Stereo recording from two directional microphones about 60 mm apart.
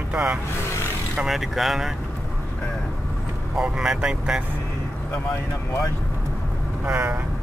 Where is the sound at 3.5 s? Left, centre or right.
Centre.